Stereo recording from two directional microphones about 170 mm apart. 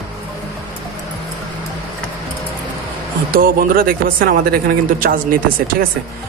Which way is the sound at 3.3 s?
60° right (ahead or behind).